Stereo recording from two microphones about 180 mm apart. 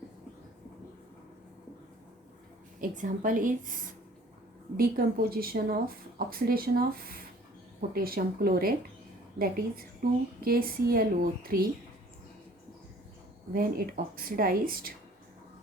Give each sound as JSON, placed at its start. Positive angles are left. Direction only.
{"t": 2.8, "sound": "speech", "side_deg": -45}
{"t": 13.5, "sound": "speech", "side_deg": -55}